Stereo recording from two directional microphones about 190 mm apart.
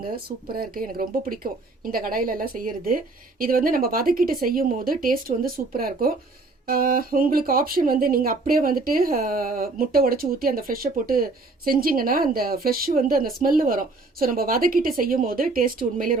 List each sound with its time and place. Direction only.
0.5 s speech: 50° right (ahead or behind)